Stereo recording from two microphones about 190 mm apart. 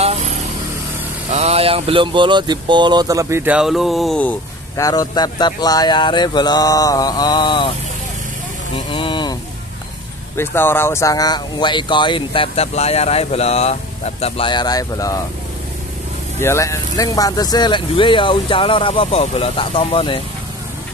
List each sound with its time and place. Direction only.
1.3 s speech: 35° right (ahead or behind); by 7.7 s 25° left (ahead or behind)
8.7 s a sound: 25° left (ahead or behind)
10.3 s speech: 10° left (ahead or behind)
16.3 s speech: 15° left (ahead or behind)